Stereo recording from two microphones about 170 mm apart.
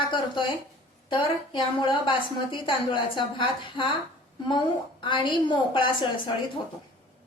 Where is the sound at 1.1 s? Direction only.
30° left (ahead or behind).